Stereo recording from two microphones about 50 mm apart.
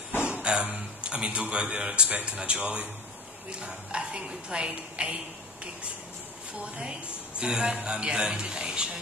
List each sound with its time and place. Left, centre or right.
0.3 s a sound: centre
2.3 s a woman's voice: right
6.6 s speech: right